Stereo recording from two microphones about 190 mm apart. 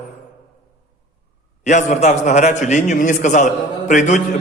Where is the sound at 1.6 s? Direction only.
40° left (ahead or behind).